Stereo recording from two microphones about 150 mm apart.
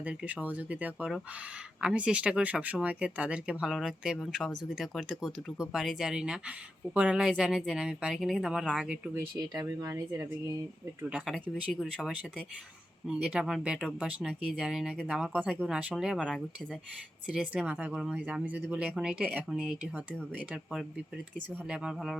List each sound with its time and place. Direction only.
0.0 s speech: 10° right (ahead or behind)
9.6 s speech: 20° right (ahead or behind)
11.3 s speech: 5° left (ahead or behind)